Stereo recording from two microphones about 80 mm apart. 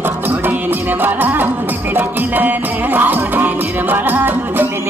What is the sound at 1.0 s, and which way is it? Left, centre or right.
Music, right.